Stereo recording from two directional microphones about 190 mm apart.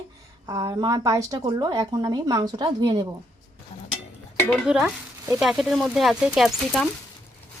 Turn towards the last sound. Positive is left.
turn(degrees=0)  # may be behind; listen again after turning